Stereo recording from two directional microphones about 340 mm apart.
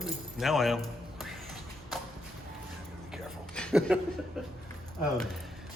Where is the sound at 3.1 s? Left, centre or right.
Centre.